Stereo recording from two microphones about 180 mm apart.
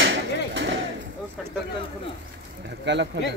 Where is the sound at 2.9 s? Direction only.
75° right (ahead or behind).